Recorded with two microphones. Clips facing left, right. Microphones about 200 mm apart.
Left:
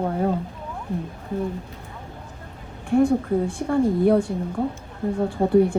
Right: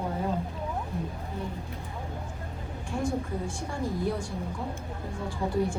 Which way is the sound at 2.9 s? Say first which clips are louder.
Left 12 dB; 60° left (ahead or behind).